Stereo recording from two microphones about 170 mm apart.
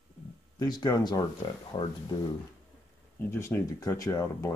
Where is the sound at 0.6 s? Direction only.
25° left (ahead or behind).